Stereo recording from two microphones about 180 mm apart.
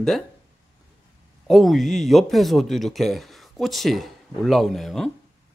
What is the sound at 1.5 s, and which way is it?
Speech, centre (ahead or behind).